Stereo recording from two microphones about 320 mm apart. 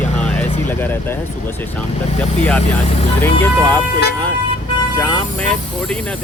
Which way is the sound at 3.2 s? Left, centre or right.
Centre.